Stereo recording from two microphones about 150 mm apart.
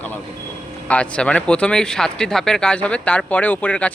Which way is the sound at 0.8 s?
10° left (ahead or behind).